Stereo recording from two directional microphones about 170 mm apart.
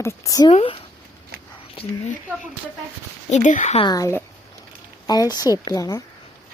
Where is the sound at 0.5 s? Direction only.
35° left (ahead or behind).